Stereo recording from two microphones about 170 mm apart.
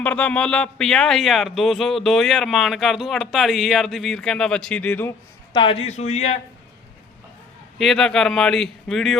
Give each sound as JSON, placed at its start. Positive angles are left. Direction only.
{"t": 0.0, "sound": "speech", "side_deg": 5}
{"t": 5.8, "sound": "a man's voice", "side_deg": 40}
{"t": 7.8, "sound": "speech", "side_deg": 0}